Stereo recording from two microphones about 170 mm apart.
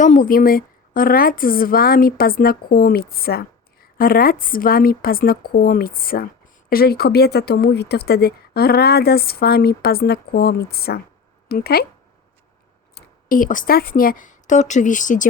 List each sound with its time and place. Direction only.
0.0 s a woman's voice: 50° left (ahead or behind)
12.9 s speech: 55° left (ahead or behind)